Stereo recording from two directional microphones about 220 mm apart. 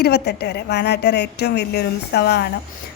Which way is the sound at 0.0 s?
50° left (ahead or behind).